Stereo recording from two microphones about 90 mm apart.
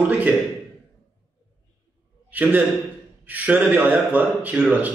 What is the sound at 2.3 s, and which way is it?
A man's voice, 20° right (ahead or behind).